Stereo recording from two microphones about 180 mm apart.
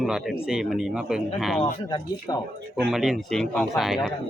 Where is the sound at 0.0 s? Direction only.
Centre (ahead or behind).